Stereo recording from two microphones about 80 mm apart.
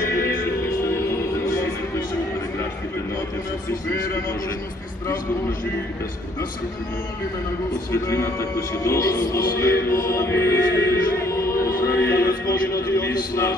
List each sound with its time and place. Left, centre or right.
0.8 s music: left
7.9 s speech: left